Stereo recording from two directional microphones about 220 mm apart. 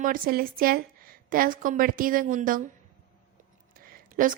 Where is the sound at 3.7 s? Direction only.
40° right (ahead or behind).